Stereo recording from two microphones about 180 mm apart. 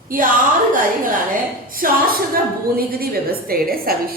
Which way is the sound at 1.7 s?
50° right (ahead or behind).